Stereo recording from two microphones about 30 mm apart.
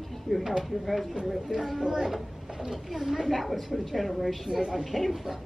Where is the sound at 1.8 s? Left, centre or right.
Right.